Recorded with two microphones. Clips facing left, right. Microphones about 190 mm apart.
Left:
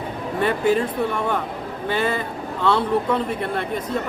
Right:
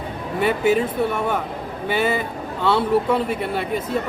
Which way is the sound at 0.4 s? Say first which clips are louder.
Right 1 dB; 5° right (ahead or behind).